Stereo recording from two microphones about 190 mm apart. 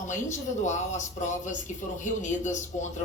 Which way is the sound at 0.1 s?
40° left (ahead or behind).